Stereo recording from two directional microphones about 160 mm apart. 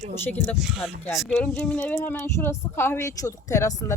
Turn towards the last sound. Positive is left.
turn(degrees=20)  # may be behind; listen again after turning